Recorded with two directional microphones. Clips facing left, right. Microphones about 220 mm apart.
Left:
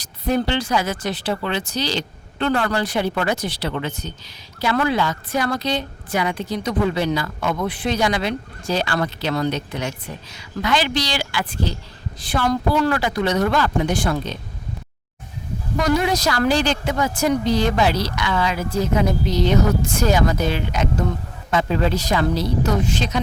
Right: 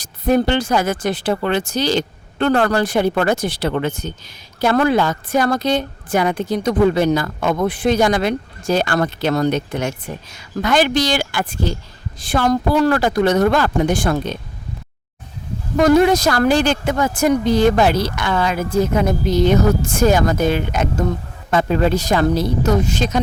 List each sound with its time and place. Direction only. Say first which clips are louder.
0.0 s a woman's voice: right 5 dB; 50° right (ahead or behind)
15.8 s a woman's voice: right 7 dB; 50° right (ahead or behind)